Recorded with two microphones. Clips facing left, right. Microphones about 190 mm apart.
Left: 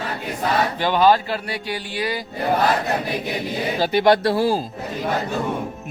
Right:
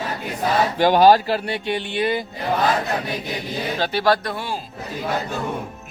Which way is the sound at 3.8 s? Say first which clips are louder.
Left 4 dB; 15° left (ahead or behind).